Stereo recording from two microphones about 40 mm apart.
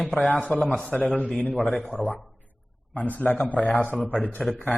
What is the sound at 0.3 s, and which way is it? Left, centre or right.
A man's voice, left.